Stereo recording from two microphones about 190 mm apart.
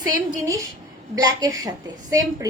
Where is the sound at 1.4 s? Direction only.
20° right (ahead or behind).